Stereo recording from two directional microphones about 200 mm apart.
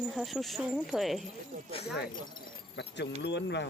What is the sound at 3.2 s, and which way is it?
Speech, 60° left (ahead or behind).